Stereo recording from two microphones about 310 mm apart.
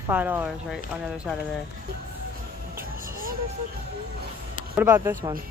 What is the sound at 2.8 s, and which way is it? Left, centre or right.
Music, right.